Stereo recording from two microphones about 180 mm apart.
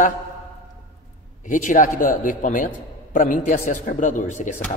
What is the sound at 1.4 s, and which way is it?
A man's voice, 45° left (ahead or behind).